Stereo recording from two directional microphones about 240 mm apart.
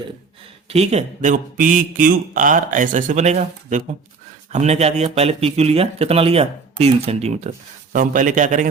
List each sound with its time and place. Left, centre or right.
0.7 s speech: right